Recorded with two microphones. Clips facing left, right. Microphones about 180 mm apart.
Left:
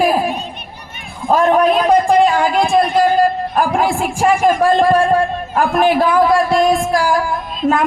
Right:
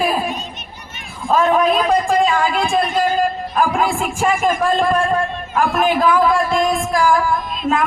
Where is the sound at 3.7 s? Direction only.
35° left (ahead or behind).